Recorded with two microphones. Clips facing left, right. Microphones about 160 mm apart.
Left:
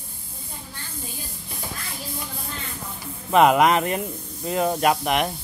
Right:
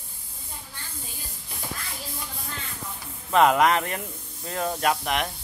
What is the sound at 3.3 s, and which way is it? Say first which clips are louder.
Speech: left 3 dB; 15° left (ahead or behind).